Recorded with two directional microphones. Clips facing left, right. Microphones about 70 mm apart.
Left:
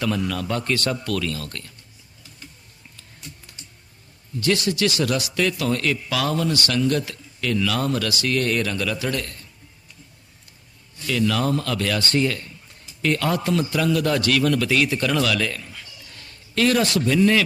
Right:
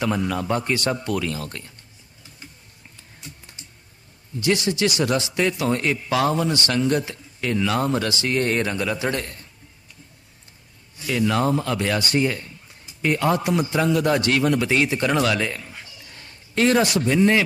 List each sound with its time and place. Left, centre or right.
0.0 s a man's voice: right
4.4 s a man's voice: right
11.1 s a man's voice: right